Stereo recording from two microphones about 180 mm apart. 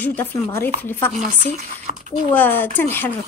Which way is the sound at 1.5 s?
40° right (ahead or behind).